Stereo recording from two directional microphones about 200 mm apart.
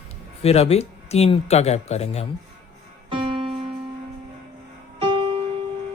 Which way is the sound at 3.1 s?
25° right (ahead or behind).